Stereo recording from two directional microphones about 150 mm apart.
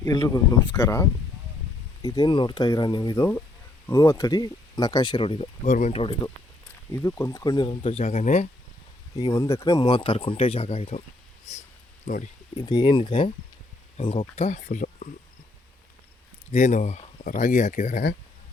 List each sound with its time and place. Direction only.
0.0 s speech: 20° left (ahead or behind)
3.8 s speech: 15° left (ahead or behind); by 5.5 s 35° left (ahead or behind)
5.6 s speech: 55° left (ahead or behind)
6.9 s speech: 20° left (ahead or behind)
7.7 s speech: 40° left (ahead or behind)
9.3 s speech: 20° left (ahead or behind); by 11.0 s 40° left (ahead or behind)
12.0 s speech: 55° left (ahead or behind)
12.5 s speech: 25° left (ahead or behind); by 15.0 s 55° left (ahead or behind)
16.5 s speech: 50° left (ahead or behind)